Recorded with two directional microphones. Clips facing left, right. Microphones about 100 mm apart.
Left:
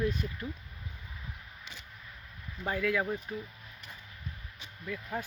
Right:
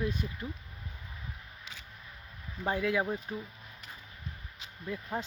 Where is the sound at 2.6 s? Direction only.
25° right (ahead or behind).